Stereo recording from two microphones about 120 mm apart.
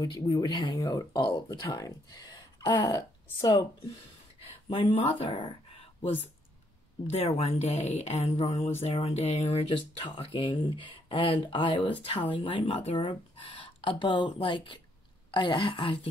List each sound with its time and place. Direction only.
0.0 s speech: 35° left (ahead or behind)
4.5 s a sound: 55° left (ahead or behind)
5.0 s speech: 45° left (ahead or behind)
7.1 s speech: 60° left (ahead or behind)